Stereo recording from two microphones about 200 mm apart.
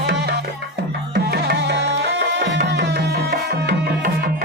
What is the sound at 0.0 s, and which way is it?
Music, 55° right (ahead or behind).